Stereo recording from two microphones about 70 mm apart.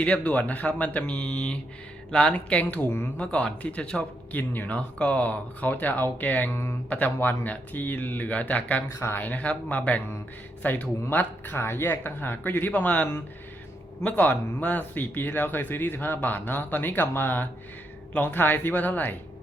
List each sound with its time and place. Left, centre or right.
0.0 s speech: left
4.4 s speech: left